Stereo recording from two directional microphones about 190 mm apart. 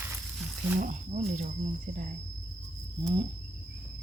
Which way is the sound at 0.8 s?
45° right (ahead or behind).